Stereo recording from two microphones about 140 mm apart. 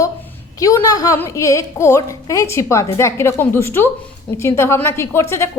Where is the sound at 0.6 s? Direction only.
25° left (ahead or behind).